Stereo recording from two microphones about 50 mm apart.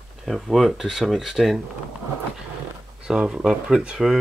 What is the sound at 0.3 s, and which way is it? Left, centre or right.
Speech, centre.